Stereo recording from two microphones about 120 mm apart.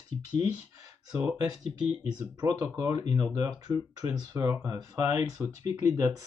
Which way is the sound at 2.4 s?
30° right (ahead or behind).